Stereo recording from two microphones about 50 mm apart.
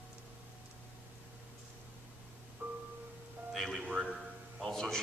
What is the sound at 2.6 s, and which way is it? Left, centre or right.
Music, right.